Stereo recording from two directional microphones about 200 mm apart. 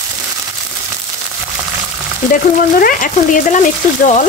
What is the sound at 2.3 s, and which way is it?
Speech, 45° left (ahead or behind).